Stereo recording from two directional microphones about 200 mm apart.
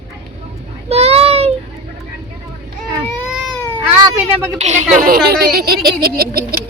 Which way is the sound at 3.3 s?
5° right (ahead or behind).